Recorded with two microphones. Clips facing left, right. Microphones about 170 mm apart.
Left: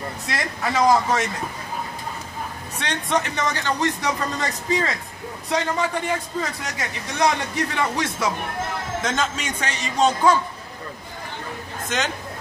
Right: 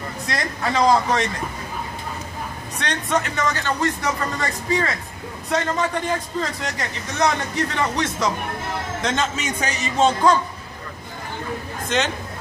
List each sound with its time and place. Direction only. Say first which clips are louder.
0.3 s a man's voice: right 2 dB; 10° left (ahead or behind)
2.8 s a man's voice: right 1 dB; 15° left (ahead or behind); by 10.1 s 5° right (ahead or behind)